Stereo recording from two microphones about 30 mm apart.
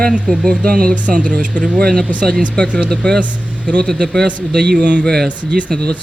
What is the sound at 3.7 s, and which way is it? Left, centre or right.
Speech, left.